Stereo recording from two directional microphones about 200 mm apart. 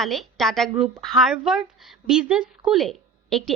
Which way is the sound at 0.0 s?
Centre (ahead or behind).